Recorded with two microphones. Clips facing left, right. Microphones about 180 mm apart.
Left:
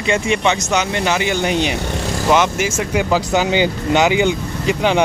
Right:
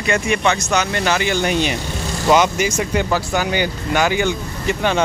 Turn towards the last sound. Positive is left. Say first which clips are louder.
# left 3 dB
turn(degrees=15)  # may be behind; listen again after turning